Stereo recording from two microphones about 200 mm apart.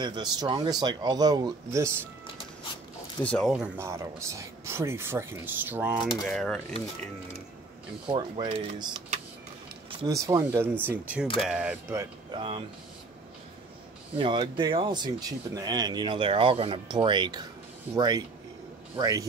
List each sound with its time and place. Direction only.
0.0 s speech: 20° right (ahead or behind)
3.2 s speech: 5° left (ahead or behind)
8.1 s speech: 25° right (ahead or behind)
9.8 s a sound: 25° right (ahead or behind)
10.1 s speech: 15° right (ahead or behind)
12.3 s speech: 25° right (ahead or behind)
14.1 s speech: 25° right (ahead or behind)